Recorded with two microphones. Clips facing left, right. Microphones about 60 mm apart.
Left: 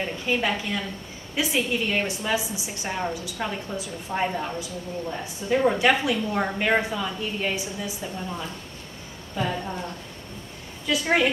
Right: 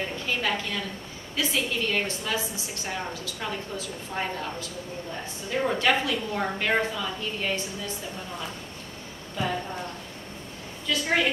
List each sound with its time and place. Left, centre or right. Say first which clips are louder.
0.0 s a woman's voice: left 3 dB; centre
10.9 s a woman's voice: left 3 dB; centre